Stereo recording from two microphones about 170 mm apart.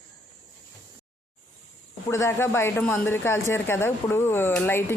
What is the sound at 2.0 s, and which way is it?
Speech, 15° left (ahead or behind).